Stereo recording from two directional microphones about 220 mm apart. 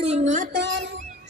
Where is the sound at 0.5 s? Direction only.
55° right (ahead or behind).